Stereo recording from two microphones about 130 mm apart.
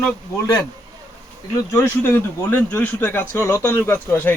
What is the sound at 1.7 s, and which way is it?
Speech, 20° left (ahead or behind).